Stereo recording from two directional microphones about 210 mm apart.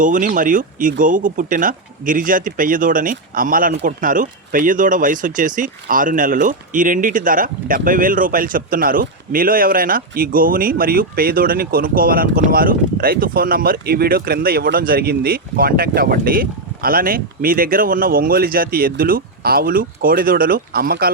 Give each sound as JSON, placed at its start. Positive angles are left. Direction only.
{"t": 0.0, "sound": "speech", "side_deg": -40}